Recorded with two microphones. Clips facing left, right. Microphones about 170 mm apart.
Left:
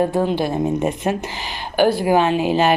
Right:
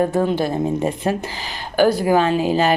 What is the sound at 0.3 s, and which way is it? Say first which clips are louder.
Speech: even; 35° right (ahead or behind).